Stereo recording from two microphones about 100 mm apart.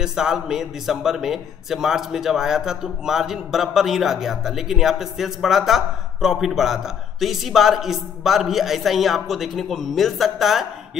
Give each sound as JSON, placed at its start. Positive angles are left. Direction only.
{"t": 0.0, "sound": "a man's voice", "side_deg": -5}